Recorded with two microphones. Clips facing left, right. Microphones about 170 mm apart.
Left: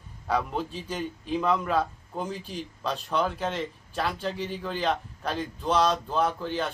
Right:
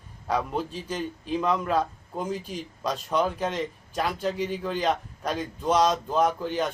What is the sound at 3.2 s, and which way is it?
Speech, 10° right (ahead or behind).